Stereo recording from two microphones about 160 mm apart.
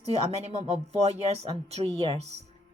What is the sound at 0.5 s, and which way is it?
Speech, 40° right (ahead or behind).